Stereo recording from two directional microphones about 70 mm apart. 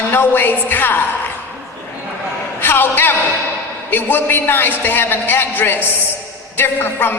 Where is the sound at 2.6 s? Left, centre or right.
Left.